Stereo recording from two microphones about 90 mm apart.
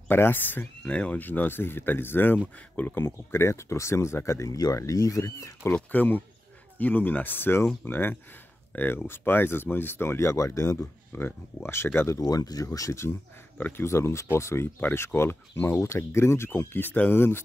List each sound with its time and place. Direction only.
0.1 s speech: 20° left (ahead or behind)
5.8 s speech: 20° left (ahead or behind); by 10.8 s 35° left (ahead or behind)
11.1 s speech: 25° left (ahead or behind)
12.2 s speech: 45° left (ahead or behind)
13.6 s speech: 20° left (ahead or behind)